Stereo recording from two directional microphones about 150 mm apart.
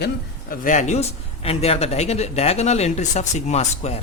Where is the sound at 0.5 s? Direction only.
60° left (ahead or behind).